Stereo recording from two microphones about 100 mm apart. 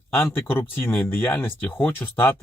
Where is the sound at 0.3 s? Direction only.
20° left (ahead or behind).